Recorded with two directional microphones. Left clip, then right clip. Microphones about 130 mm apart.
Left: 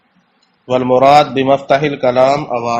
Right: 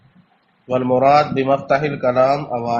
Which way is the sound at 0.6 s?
40° left (ahead or behind).